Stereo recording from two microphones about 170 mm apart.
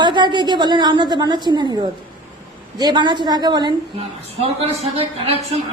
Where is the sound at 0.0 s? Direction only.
25° right (ahead or behind).